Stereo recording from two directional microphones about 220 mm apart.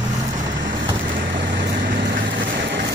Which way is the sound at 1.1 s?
40° right (ahead or behind).